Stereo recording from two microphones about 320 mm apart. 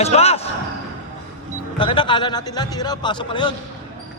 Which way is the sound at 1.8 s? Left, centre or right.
Centre.